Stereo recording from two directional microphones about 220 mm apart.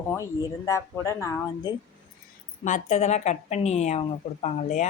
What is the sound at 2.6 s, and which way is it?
Speech, 35° left (ahead or behind).